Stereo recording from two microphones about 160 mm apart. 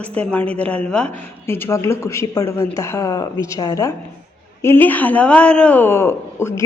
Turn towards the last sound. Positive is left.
turn(degrees=15)  # may be behind; listen again after turning